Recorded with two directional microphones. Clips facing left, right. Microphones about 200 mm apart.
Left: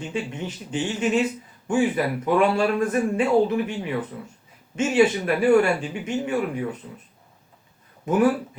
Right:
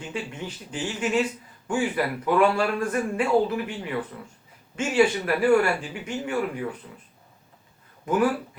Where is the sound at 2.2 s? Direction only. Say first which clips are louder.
Left 1 dB; 20° left (ahead or behind).